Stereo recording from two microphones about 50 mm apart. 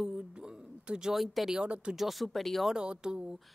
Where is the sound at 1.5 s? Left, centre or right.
Right.